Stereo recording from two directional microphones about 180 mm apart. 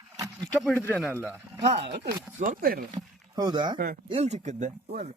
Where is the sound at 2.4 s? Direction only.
50° right (ahead or behind).